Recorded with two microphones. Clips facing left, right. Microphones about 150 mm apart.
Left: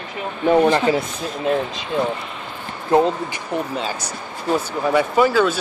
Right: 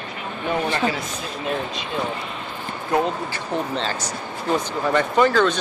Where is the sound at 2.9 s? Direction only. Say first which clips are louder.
Left 5 dB; 25° left (ahead or behind).